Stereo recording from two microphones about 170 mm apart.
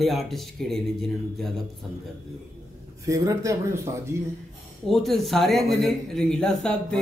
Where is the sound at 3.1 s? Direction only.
20° right (ahead or behind).